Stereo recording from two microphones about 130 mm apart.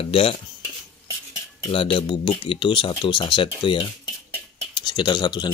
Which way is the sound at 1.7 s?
45° left (ahead or behind).